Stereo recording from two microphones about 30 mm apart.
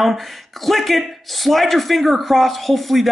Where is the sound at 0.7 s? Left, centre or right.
Centre.